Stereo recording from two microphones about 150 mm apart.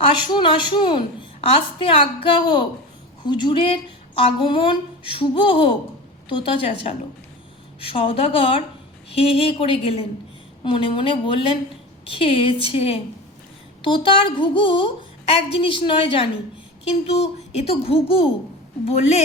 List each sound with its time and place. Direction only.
0.2 s a woman's voice: 30° left (ahead or behind)
7.8 s a woman's voice: 40° left (ahead or behind)